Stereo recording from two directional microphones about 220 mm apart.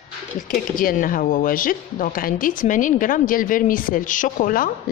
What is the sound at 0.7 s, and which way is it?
Speech, 40° left (ahead or behind).